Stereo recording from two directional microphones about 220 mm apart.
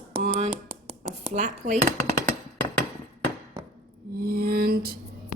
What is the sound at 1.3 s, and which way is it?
Speech, 30° right (ahead or behind).